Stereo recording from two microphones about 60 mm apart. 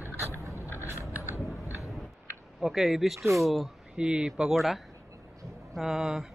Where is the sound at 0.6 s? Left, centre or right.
Left.